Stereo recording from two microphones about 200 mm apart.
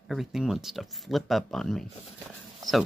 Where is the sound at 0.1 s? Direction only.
Centre (ahead or behind).